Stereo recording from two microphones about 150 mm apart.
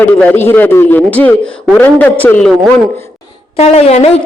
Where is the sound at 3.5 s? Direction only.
45° left (ahead or behind).